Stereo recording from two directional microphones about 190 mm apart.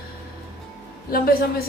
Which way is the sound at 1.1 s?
50° left (ahead or behind).